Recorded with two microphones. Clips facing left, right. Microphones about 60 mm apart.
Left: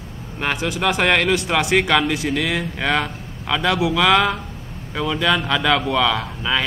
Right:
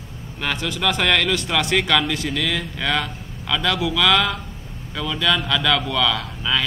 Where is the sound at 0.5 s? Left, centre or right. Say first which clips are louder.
Left 2 dB; centre.